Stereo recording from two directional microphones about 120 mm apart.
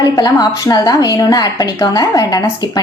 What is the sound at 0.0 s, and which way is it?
A woman's voice, 35° left (ahead or behind).